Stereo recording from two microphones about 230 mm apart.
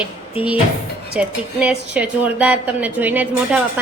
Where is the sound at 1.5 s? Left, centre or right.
Centre.